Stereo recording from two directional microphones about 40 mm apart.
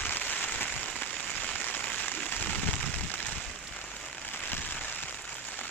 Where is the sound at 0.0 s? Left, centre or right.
Left.